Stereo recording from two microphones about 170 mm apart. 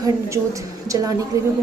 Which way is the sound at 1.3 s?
20° right (ahead or behind).